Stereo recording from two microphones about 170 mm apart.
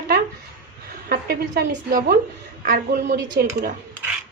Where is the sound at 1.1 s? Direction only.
65° right (ahead or behind).